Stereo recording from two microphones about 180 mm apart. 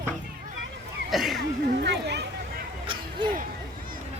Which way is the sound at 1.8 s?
70° right (ahead or behind).